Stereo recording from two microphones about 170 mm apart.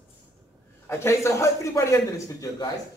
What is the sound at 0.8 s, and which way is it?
A man's voice, 15° left (ahead or behind).